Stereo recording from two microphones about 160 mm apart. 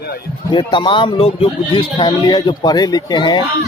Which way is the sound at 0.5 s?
30° left (ahead or behind).